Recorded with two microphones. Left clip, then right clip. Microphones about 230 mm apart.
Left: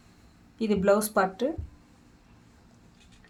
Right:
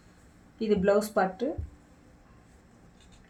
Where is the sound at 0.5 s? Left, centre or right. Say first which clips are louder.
Left 1 dB; left.